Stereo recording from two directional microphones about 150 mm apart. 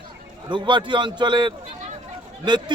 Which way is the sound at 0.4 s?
30° right (ahead or behind).